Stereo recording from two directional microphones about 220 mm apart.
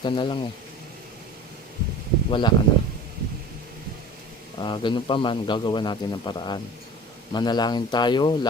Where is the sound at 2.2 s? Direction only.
20° left (ahead or behind).